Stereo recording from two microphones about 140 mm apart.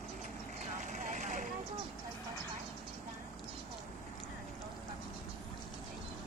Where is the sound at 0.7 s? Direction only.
60° right (ahead or behind).